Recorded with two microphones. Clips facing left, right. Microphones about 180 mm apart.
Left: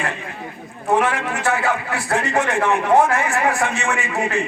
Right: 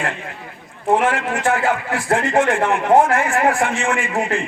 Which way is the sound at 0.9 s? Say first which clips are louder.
Right 2 dB; 50° right (ahead or behind).